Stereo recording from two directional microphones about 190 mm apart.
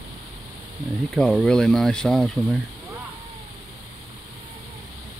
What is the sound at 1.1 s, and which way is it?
Speech, centre (ahead or behind).